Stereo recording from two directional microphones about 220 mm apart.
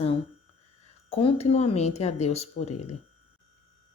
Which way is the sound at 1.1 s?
25° left (ahead or behind).